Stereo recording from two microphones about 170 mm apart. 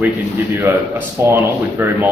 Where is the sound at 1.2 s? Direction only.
15° right (ahead or behind).